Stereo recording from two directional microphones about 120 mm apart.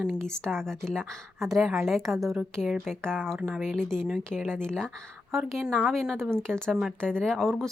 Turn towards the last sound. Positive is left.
turn(degrees=0)  # may be behind; listen again after turning